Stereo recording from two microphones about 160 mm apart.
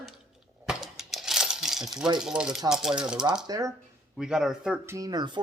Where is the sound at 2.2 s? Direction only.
5° right (ahead or behind).